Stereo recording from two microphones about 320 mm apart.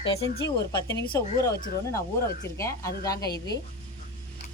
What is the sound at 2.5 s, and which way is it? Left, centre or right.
Speech, centre.